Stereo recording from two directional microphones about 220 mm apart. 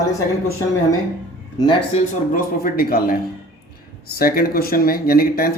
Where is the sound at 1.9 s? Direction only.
35° left (ahead or behind).